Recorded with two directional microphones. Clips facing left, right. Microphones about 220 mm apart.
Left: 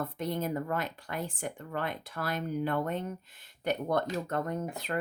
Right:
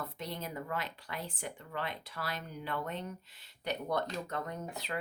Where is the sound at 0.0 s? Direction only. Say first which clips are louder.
Left 8 dB; 50° left (ahead or behind).